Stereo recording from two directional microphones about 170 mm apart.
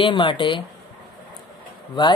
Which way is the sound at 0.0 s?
30° left (ahead or behind).